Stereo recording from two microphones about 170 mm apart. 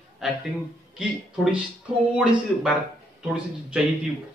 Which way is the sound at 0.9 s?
5° right (ahead or behind).